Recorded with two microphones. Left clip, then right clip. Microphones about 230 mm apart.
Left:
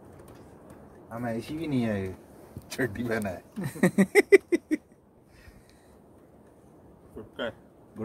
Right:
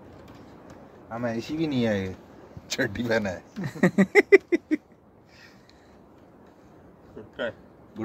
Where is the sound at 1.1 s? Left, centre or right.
Right.